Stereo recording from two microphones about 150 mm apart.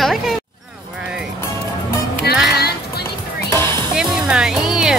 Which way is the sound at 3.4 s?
15° left (ahead or behind).